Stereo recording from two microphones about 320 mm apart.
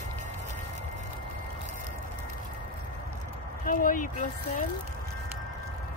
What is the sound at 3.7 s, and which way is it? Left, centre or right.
Speech, left.